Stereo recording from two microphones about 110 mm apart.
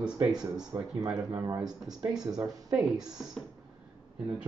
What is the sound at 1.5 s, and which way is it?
Speech, 35° right (ahead or behind).